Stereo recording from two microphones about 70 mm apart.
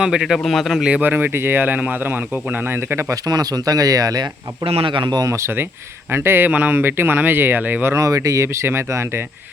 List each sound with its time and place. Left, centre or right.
0.0 s a man's voice: centre
1.0 s speech: right
3.2 s speech: right
5.0 s speech: right
5.3 s speech: right
7.9 s speech: right